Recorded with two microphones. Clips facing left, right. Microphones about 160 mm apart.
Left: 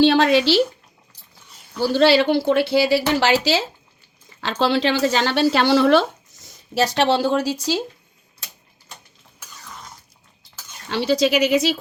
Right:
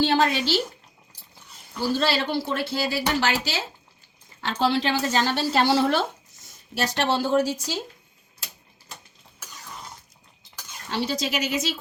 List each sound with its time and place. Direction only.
0.0 s speech: 85° left
1.8 s speech: 80° left
10.8 s speech: 75° left (ahead or behind)